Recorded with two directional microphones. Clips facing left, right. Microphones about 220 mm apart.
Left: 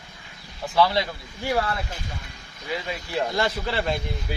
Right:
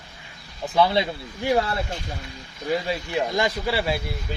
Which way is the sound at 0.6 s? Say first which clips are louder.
Right 1 dB; 20° right (ahead or behind).